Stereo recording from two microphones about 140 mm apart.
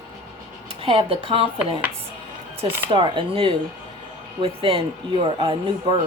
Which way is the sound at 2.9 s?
35° right (ahead or behind).